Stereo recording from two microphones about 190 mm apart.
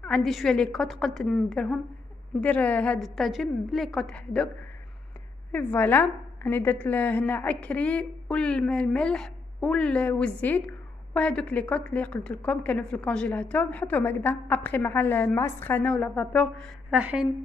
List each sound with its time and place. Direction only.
0.0 s a woman's voice: centre (ahead or behind)
5.5 s a woman's voice: 5° left (ahead or behind)
16.9 s a woman's voice: 5° right (ahead or behind)